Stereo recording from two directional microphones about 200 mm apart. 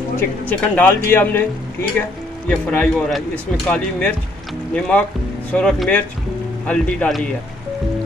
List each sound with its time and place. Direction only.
0.5 s a man's voice: 10° left (ahead or behind)